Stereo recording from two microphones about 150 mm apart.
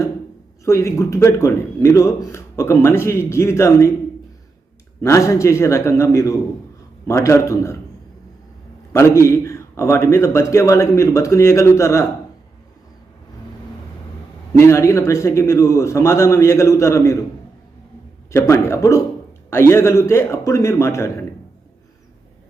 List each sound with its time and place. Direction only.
0.6 s speech: 20° left (ahead or behind)
4.9 s speech: 20° left (ahead or behind)
8.9 s speech: 20° left (ahead or behind)
14.5 s speech: 20° left (ahead or behind)
18.3 s a man's voice: 20° left (ahead or behind)